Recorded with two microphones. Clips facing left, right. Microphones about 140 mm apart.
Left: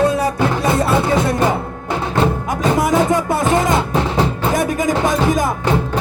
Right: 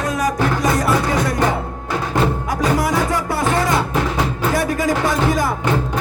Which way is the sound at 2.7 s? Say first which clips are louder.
Left 4 dB; 20° left (ahead or behind).